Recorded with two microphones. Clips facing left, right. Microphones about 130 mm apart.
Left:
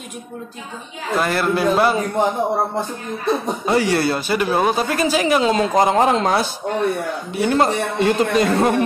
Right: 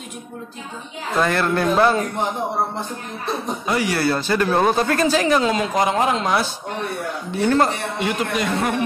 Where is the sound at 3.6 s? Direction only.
30° left (ahead or behind).